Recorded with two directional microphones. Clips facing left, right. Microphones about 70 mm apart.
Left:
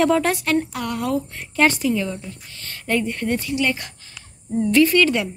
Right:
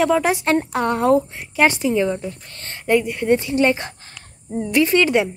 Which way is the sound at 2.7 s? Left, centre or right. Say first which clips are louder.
Right 5 dB; centre.